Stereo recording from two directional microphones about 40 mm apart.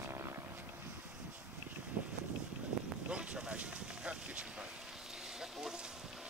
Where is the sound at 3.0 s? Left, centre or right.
Right.